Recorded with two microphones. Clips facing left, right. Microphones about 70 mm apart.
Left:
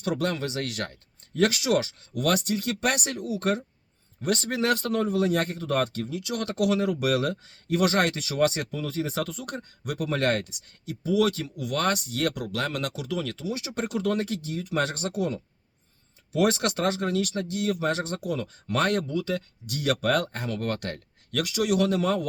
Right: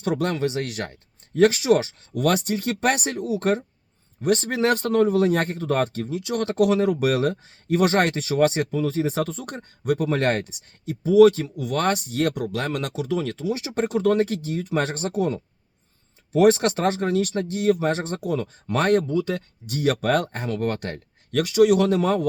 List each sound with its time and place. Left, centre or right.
0.0 s speech: right
4.2 s speech: right